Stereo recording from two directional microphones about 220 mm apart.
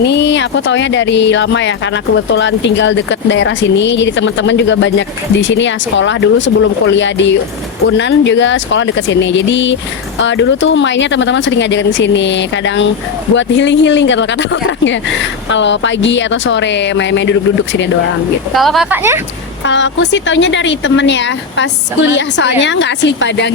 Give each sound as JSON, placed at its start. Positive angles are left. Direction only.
{"t": 0.0, "sound": "speech", "side_deg": 50}
{"t": 18.5, "sound": "speech", "side_deg": 0}
{"t": 19.6, "sound": "speech", "side_deg": 55}